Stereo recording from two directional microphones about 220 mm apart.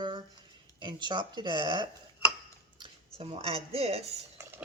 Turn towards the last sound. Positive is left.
turn(degrees=-25)  # may be behind; listen again after turning